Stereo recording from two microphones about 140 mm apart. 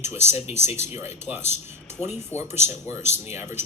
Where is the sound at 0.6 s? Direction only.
50° left (ahead or behind).